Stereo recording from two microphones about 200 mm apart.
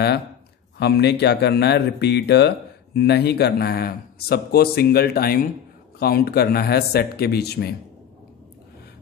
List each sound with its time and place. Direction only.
0.7 s speech: 55° left (ahead or behind)